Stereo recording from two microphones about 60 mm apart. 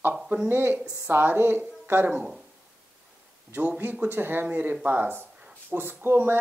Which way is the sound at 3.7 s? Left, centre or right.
Right.